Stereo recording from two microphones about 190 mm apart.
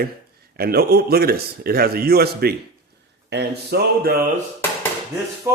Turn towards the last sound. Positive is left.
turn(degrees=-15)  # may be behind; listen again after turning